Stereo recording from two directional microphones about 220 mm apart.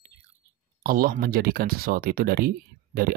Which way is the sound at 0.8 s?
40° right (ahead or behind).